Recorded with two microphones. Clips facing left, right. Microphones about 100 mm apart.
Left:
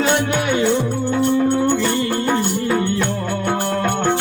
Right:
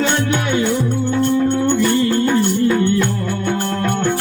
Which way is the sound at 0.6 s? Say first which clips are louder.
Even; 30° left (ahead or behind).